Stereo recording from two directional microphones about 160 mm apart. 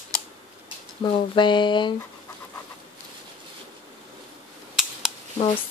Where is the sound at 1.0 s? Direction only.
30° left (ahead or behind).